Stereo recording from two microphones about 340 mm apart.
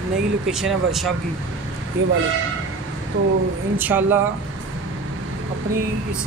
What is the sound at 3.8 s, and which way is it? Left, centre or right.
Speech, centre.